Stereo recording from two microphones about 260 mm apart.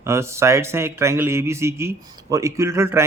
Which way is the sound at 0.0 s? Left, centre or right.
Centre.